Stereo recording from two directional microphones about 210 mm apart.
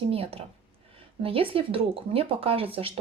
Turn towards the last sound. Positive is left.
turn(degrees=-25)  # may be behind; listen again after turning